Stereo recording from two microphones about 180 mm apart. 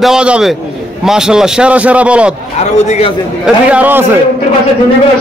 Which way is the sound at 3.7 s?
10° right (ahead or behind).